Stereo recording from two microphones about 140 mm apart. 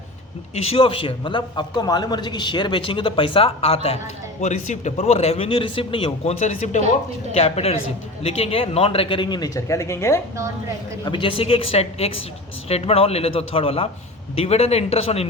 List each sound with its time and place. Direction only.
0.5 s a man's voice: 45° left (ahead or behind)
4.4 s a man's voice: 55° left (ahead or behind); by 6.3 s 40° left (ahead or behind)
6.4 s speech: 60° left (ahead or behind)
7.3 s a man's voice: 45° left (ahead or behind)
9.6 s speech: 20° left (ahead or behind)
11.0 s a man's voice: 35° left (ahead or behind)